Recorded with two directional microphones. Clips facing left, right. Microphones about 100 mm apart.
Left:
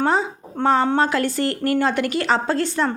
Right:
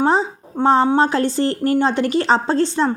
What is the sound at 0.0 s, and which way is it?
A woman's voice, 30° right (ahead or behind).